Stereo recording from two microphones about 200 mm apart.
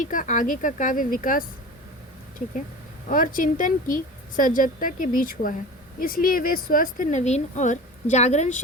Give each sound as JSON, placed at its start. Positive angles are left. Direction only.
{"t": 0.0, "sound": "a woman's voice", "side_deg": 40}
{"t": 3.1, "sound": "a woman's voice", "side_deg": 45}